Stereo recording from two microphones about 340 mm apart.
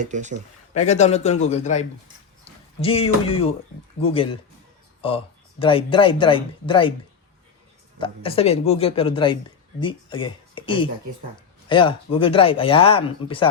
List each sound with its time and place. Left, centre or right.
0.0 s speech: right
0.8 s a man's voice: centre
7.9 s speech: centre